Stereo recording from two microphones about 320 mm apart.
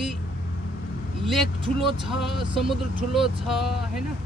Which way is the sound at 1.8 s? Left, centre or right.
Centre.